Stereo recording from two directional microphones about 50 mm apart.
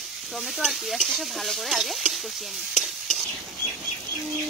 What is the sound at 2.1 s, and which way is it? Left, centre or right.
Stir, centre.